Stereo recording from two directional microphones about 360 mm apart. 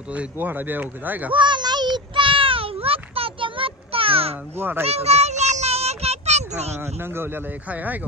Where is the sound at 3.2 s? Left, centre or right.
Centre.